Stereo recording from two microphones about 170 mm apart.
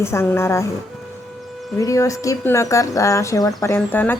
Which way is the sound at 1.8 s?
20° left (ahead or behind).